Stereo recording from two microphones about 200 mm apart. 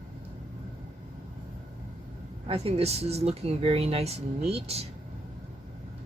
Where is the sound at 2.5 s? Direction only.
30° right (ahead or behind).